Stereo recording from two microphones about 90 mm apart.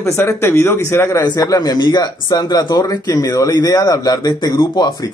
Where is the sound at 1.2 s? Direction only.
45° left (ahead or behind).